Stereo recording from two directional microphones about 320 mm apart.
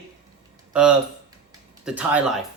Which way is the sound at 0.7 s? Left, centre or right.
Centre.